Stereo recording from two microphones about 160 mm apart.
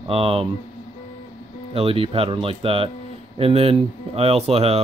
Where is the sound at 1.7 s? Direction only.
35° right (ahead or behind).